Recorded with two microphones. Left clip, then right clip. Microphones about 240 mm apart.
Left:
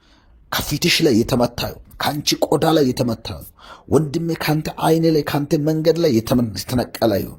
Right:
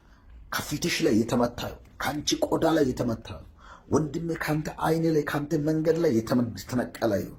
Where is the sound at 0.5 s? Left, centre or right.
Left.